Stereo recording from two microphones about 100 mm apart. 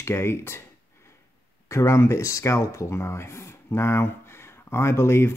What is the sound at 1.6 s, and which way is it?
Speech, 30° left (ahead or behind).